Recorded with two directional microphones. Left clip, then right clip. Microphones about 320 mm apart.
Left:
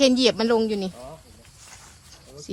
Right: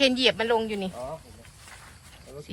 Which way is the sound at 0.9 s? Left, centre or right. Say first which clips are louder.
Right 3 dB; centre.